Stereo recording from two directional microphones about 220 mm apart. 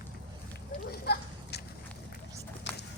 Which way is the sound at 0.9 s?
45° left (ahead or behind).